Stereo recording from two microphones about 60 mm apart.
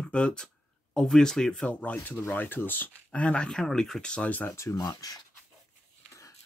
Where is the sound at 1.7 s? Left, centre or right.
Left.